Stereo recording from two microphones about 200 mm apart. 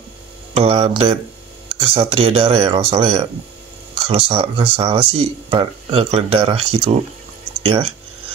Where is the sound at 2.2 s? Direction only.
30° right (ahead or behind).